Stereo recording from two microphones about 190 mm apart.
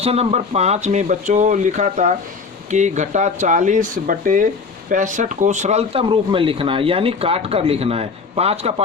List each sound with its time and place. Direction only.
0.0 s speech: 30° right (ahead or behind)